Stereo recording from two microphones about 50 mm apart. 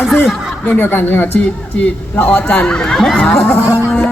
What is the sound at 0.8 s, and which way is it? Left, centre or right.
Speech, left.